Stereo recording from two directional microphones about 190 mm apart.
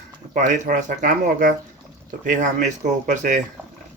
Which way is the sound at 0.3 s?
40° right (ahead or behind).